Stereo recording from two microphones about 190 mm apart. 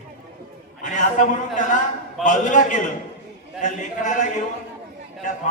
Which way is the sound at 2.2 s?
40° left (ahead or behind).